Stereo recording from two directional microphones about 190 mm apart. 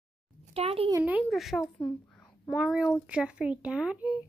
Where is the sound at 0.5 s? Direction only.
30° right (ahead or behind).